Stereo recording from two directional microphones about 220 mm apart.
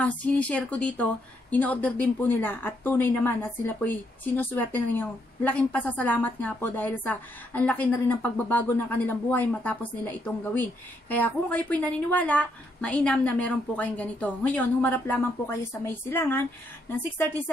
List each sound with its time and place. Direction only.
0.0 s a woman's voice: 5° left (ahead or behind)